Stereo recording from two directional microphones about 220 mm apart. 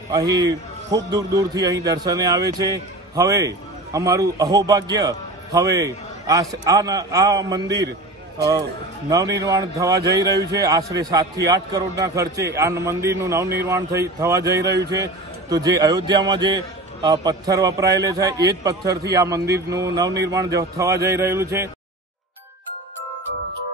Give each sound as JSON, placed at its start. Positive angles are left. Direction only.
{"t": 0.1, "sound": "a man's voice", "side_deg": -15}
{"t": 9.1, "sound": "a man's voice", "side_deg": -15}